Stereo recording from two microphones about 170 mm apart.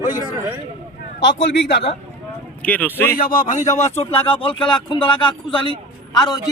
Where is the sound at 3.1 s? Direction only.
55° left (ahead or behind); by 6.4 s 25° left (ahead or behind).